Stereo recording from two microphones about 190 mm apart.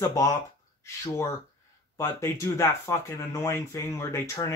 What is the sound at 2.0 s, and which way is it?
Speech, 15° left (ahead or behind).